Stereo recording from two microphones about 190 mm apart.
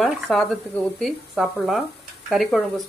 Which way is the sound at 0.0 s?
Centre (ahead or behind).